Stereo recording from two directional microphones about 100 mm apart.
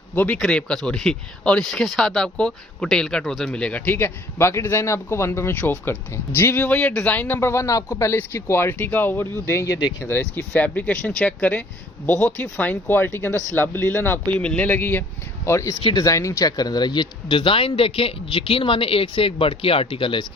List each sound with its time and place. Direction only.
0.1 s speech: 15° left (ahead or behind)
0.3 s speech: 5° left (ahead or behind)
9.5 s speech: 30° left (ahead or behind)
15.8 s speech: 60° left (ahead or behind)
16.0 s speech: 30° left (ahead or behind); by 20.2 s 60° left (ahead or behind)